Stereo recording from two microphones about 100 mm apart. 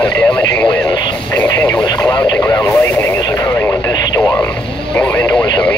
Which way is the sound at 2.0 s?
45° left (ahead or behind).